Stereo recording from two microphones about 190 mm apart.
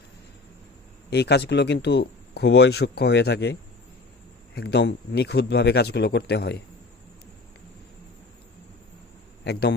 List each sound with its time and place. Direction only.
1.1 s speech: 60° left (ahead or behind)
9.4 s a man's voice: 60° left (ahead or behind)